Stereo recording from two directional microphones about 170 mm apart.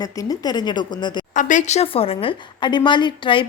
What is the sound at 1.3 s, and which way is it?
A woman's voice, 50° left (ahead or behind).